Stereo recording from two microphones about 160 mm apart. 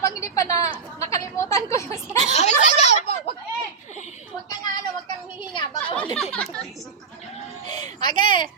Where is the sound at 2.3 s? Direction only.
45° left (ahead or behind).